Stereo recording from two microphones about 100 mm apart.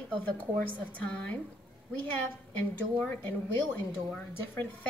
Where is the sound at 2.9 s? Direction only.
15° left (ahead or behind).